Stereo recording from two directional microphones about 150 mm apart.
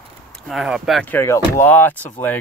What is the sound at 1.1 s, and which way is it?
Speech, 15° left (ahead or behind).